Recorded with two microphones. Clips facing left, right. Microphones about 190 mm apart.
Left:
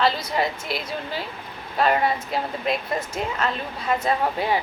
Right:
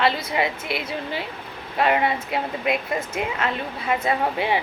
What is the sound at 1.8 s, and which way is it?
A woman's voice, 20° right (ahead or behind).